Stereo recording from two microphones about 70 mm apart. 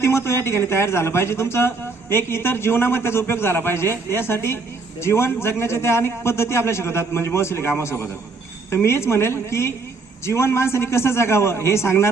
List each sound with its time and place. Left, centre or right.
0.0 s a man's voice: left